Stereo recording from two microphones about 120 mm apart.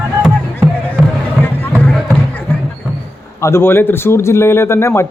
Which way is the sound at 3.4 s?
20° left (ahead or behind).